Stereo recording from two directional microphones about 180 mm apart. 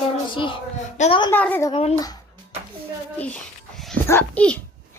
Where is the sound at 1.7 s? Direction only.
35° left (ahead or behind).